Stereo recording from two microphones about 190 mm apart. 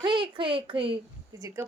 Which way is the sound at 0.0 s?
25° right (ahead or behind).